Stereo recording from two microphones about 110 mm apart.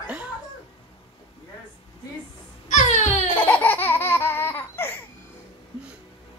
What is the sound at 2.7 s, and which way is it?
Baby cry, 90° left.